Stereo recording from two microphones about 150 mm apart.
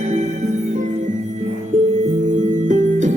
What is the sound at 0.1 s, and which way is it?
Music, 50° right (ahead or behind).